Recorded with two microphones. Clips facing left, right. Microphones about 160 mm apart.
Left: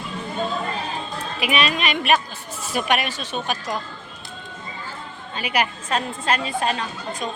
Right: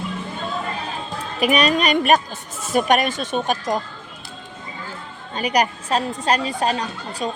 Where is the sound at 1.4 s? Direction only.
45° right (ahead or behind).